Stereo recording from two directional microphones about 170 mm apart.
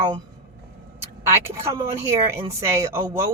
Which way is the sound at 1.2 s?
15° right (ahead or behind).